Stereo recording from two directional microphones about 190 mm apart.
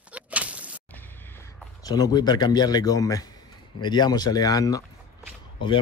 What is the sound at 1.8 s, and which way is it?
Speech, 20° left (ahead or behind).